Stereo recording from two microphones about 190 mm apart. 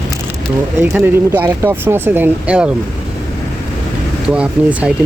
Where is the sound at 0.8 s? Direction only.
10° right (ahead or behind).